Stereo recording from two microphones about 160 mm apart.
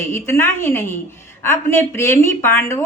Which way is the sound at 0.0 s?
15° left (ahead or behind).